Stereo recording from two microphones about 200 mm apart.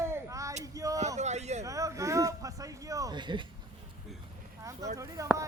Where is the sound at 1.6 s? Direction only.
15° right (ahead or behind).